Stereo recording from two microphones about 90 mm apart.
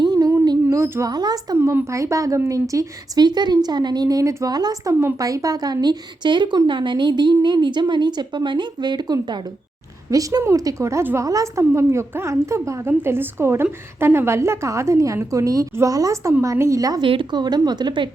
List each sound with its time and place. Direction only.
0.0 s music: 50° right (ahead or behind)
0.7 s speech: 35° right (ahead or behind)
1.1 s speech: 50° right (ahead or behind)
1.5 s a woman's voice: 30° right (ahead or behind)
17.0 s a woman's voice: 65° right (ahead or behind)